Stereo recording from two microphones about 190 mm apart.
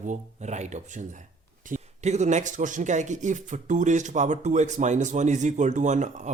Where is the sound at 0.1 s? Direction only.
35° right (ahead or behind).